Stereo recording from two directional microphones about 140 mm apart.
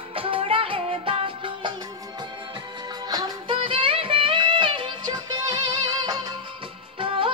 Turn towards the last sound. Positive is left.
turn(degrees=-40)  # may be behind; listen again after turning